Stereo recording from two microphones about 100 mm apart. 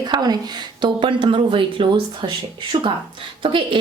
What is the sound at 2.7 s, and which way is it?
Speech, 65° right (ahead or behind).